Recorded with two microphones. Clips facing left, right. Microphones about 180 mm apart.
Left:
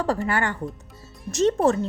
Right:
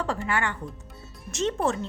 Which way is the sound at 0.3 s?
40° left (ahead or behind).